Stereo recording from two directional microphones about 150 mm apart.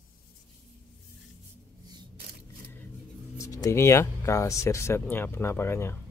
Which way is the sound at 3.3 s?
20° left (ahead or behind).